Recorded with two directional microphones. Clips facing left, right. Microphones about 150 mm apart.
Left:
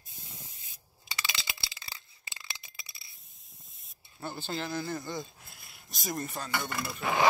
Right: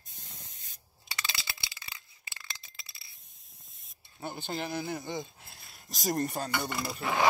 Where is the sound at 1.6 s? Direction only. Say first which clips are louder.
Left 1 dB; 30° left (ahead or behind).